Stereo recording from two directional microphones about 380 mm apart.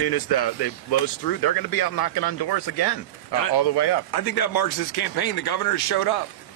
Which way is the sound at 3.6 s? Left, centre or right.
Left.